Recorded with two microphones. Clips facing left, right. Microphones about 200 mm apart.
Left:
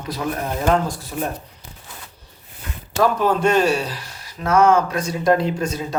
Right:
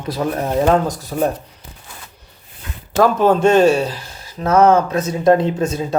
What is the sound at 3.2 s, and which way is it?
Speech, 25° right (ahead or behind).